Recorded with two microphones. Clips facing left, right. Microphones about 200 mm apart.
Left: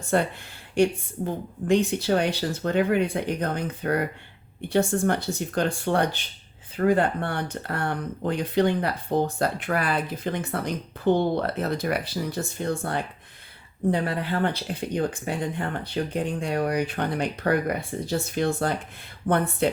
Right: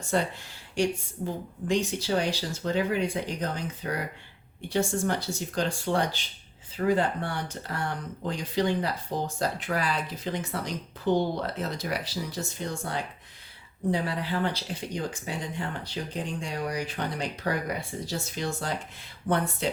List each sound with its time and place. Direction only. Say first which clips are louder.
0.1 s speech: left 4 dB; 55° left (ahead or behind)